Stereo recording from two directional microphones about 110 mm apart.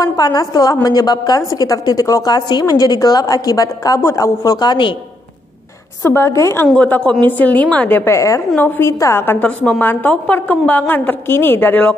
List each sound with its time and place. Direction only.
0.0 s a woman's voice: 35° left (ahead or behind)
2.3 s a woman's voice: 40° left (ahead or behind)
6.0 s a woman's voice: 25° left (ahead or behind)
6.7 s a woman's voice: 10° left (ahead or behind)